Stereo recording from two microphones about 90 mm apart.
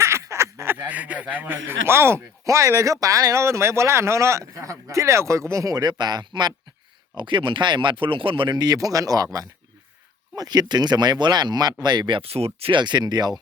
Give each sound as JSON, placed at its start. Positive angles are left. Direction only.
{"t": 0.0, "sound": "speech", "side_deg": -35}
{"t": 7.2, "sound": "speech", "side_deg": -65}
{"t": 8.5, "sound": "speech", "side_deg": -45}
{"t": 12.5, "sound": "speech", "side_deg": -90}
{"t": 12.8, "sound": "speech", "side_deg": -55}